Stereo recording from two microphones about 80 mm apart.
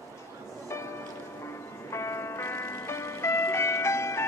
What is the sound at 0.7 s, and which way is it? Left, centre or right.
Music, left.